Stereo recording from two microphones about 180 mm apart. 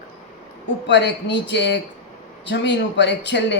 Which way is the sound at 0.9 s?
75° left (ahead or behind).